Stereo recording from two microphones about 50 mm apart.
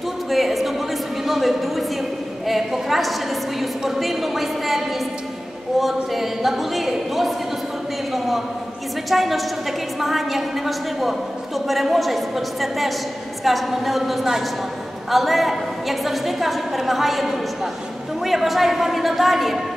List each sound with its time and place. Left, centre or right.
0.3 s a sound: centre
2.4 s a woman's voice: centre
9.1 s a woman's voice: centre